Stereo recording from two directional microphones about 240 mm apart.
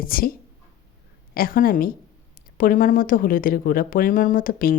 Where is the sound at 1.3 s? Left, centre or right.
Left.